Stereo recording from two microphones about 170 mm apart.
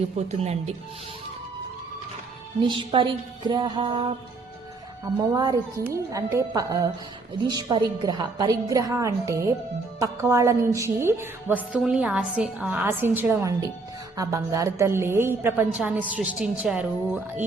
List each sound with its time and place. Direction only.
0.2 s speech: 40° right (ahead or behind)
2.6 s a woman's voice: 30° right (ahead or behind)
5.3 s a woman's voice: 20° right (ahead or behind)